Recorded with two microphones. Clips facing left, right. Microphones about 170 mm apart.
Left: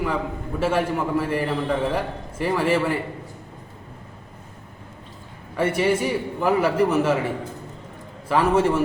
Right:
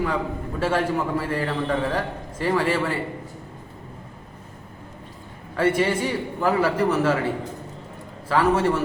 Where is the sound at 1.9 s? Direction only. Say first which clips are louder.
Left 1 dB; 10° left (ahead or behind).